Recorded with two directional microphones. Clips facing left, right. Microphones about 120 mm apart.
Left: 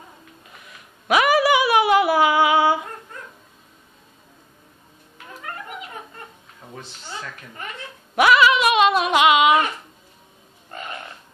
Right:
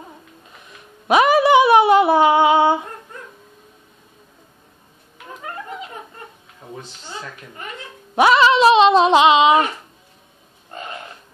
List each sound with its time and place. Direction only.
1.0 s humming: 25° right (ahead or behind)
5.4 s a sound: 25° right (ahead or behind)
8.2 s speech: 30° right (ahead or behind)